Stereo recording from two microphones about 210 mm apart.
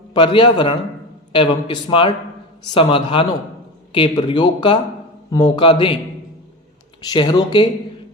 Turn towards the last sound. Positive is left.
turn(degrees=20)  # may be behind; listen again after turning